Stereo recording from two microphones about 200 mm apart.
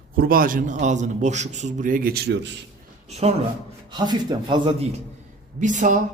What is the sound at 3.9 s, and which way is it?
Speech, 20° right (ahead or behind).